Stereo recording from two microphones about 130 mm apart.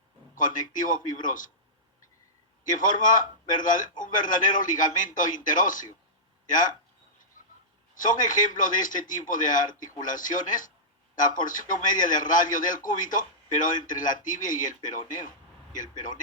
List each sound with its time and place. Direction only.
0.3 s a man's voice: 90° left
2.6 s a man's voice: 85° left
7.9 s a man's voice: 90° left